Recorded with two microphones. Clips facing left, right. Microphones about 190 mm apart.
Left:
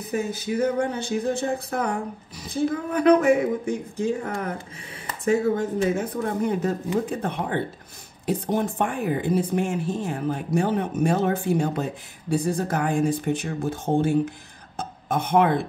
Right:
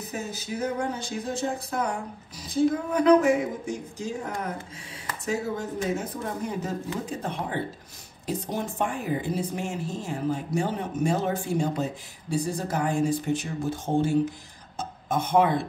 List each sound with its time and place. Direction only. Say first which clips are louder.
0.9 s speech: left 6 dB; 60° left (ahead or behind)